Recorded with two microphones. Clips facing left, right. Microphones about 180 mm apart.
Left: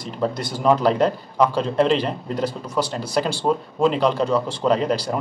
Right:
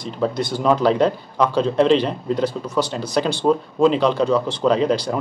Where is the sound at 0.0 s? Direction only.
10° left (ahead or behind).